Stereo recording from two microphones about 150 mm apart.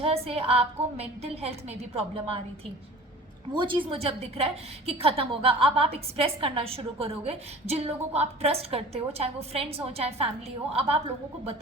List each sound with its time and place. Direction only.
0.0 s a woman's voice: 40° right (ahead or behind)
3.5 s a woman's voice: 35° right (ahead or behind)